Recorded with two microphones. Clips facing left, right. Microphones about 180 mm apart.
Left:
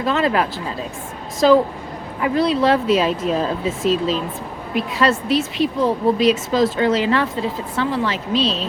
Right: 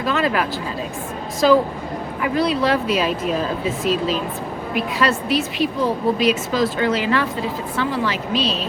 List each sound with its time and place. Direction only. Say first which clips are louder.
0.0 s speech: left 2 dB; 25° left (ahead or behind)